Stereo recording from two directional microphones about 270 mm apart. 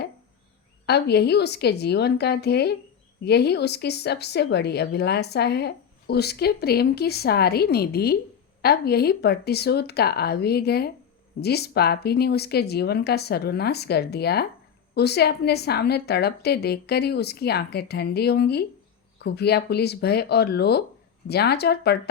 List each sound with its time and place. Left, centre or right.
0.9 s speech: left